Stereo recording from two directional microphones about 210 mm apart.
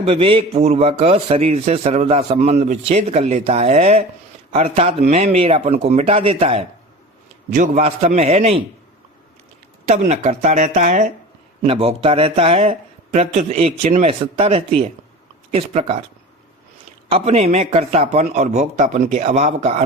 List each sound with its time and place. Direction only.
0.0 s a man's voice: 25° right (ahead or behind)
9.8 s a man's voice: 35° right (ahead or behind)
17.1 s a man's voice: 30° right (ahead or behind)